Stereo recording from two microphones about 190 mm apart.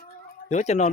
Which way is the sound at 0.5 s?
35° left (ahead or behind).